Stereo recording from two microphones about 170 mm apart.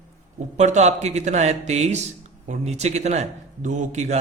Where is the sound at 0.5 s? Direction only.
40° right (ahead or behind).